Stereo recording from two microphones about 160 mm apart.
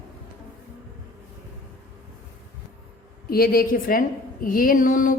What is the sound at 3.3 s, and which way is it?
A woman's voice, 65° left (ahead or behind).